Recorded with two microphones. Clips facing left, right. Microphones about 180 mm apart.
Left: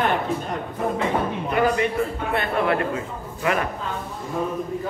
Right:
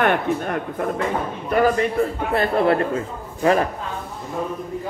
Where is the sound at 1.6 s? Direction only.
40° right (ahead or behind).